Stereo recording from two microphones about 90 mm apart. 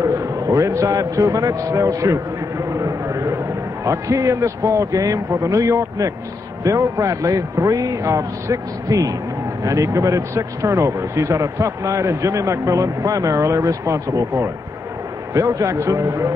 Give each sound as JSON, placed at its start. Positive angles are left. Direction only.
{"t": 0.0, "sound": "a man's voice", "side_deg": -35}
{"t": 2.8, "sound": "a sound", "side_deg": -35}
{"t": 3.8, "sound": "speech", "side_deg": -35}